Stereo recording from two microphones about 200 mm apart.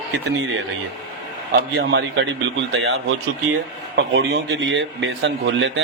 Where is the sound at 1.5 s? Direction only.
60° right (ahead or behind); by 2.9 s 75° right (ahead or behind).